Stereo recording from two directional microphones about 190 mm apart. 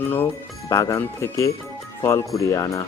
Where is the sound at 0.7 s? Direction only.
15° left (ahead or behind).